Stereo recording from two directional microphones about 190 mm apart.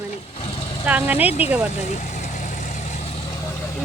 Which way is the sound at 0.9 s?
10° right (ahead or behind).